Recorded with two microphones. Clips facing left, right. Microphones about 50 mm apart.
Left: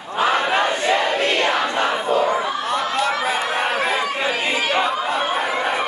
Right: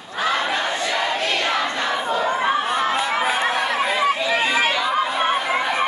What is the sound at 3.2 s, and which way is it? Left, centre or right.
Chatter, right.